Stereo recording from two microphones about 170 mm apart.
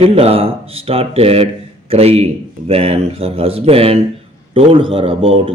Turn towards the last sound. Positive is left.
turn(degrees=-35)  # may be behind; listen again after turning